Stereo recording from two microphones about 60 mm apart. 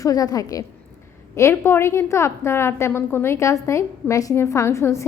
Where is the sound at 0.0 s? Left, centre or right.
Left.